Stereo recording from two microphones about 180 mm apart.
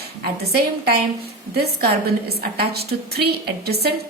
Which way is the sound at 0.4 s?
60° right (ahead or behind).